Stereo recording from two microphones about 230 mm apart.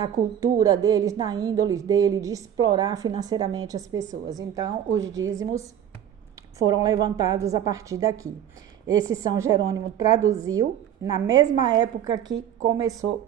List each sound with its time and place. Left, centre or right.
0.0 s a woman's voice: centre
6.7 s a woman's voice: centre